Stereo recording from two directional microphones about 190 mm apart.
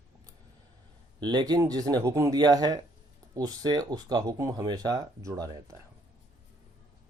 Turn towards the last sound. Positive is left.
turn(degrees=-20)  # may be behind; listen again after turning